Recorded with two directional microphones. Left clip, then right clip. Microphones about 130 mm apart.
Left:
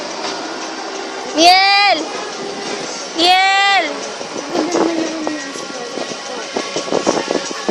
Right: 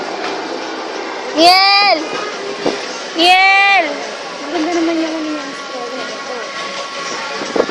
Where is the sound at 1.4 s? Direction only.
25° left (ahead or behind).